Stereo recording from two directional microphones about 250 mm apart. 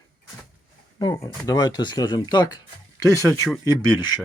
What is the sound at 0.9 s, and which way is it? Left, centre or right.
Speech, centre.